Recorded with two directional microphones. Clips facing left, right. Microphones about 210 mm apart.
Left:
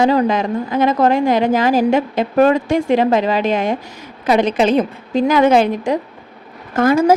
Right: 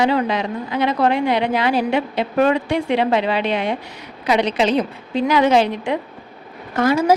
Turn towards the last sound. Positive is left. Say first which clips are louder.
# left 4 dB
turn(degrees=50)  # may be behind; listen again after turning